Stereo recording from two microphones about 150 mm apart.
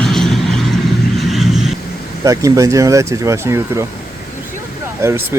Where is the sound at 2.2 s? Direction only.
20° right (ahead or behind).